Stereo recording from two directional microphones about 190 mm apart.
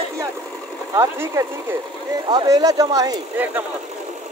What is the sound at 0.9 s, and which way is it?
Speech, 15° right (ahead or behind).